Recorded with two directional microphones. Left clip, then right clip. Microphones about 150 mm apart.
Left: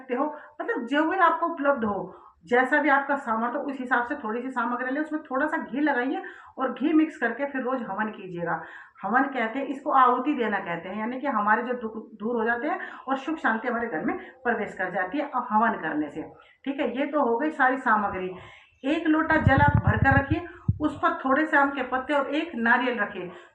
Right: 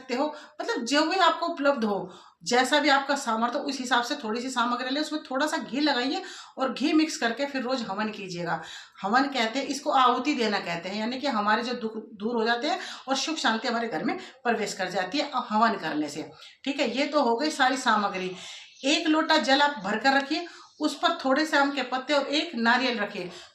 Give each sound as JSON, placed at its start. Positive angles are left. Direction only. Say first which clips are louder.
{"t": 0.6, "sound": "speech", "louder": "even", "side_deg": -40}